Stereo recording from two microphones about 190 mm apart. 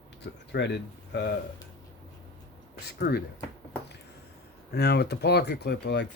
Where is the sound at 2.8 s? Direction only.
55° left (ahead or behind).